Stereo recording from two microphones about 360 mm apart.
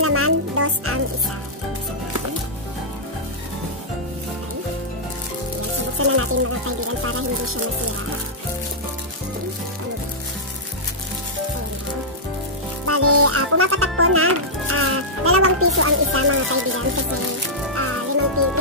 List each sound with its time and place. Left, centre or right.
0.0 s music: right
5.9 s speech: right
12.8 s music: right
18.4 s speech: right